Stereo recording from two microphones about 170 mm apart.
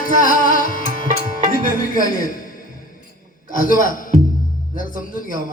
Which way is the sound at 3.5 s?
55° left (ahead or behind).